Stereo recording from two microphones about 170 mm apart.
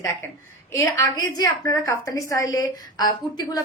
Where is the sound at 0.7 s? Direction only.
20° left (ahead or behind).